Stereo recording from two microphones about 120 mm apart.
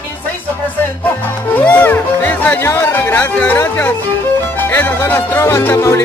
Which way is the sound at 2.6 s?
20° left (ahead or behind).